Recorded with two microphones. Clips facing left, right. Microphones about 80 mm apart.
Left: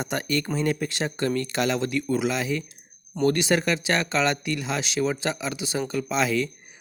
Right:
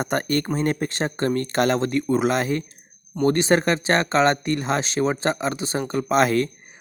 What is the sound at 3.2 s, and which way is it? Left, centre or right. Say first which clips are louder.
Speech: right 3 dB; right.